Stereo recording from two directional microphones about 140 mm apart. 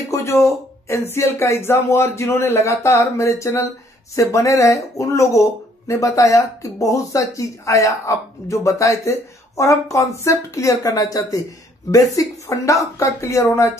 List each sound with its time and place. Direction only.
0.1 s speech: 20° left (ahead or behind)